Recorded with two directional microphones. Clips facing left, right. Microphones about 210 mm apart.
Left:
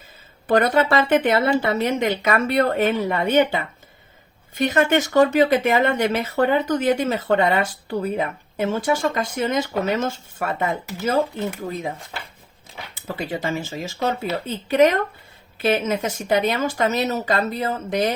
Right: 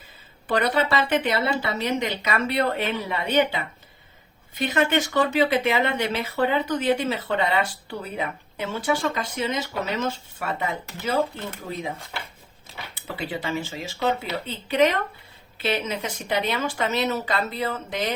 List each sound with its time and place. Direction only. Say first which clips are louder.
0.4 s speech: left 5 dB; 45° left (ahead or behind)
13.1 s speech: left 3 dB; 45° left (ahead or behind)